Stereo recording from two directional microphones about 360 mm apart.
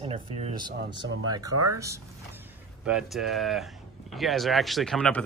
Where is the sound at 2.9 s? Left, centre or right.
Centre.